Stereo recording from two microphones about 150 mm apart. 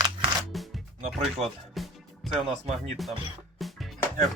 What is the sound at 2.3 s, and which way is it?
Speech, 45° right (ahead or behind).